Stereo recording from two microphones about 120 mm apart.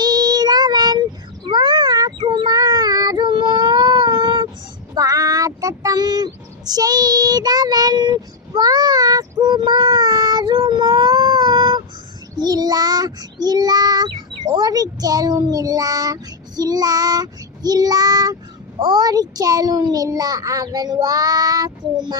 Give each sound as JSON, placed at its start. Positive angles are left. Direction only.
{"t": 0.0, "sound": "child singing", "side_deg": -35}
{"t": 4.9, "sound": "child singing", "side_deg": -30}
{"t": 18.8, "sound": "a child's voice", "side_deg": -35}